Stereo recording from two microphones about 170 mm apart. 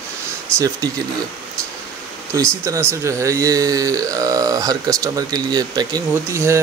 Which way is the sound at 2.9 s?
15° right (ahead or behind).